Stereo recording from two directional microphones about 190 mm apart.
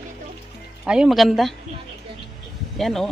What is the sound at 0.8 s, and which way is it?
Speech, centre (ahead or behind).